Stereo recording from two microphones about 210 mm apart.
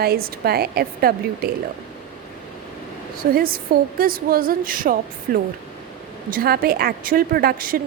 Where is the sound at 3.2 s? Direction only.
45° right (ahead or behind).